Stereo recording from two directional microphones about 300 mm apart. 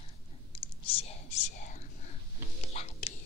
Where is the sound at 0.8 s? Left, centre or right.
Centre.